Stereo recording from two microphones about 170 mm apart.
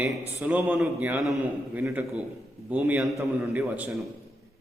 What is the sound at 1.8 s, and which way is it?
A man's voice, 15° right (ahead or behind).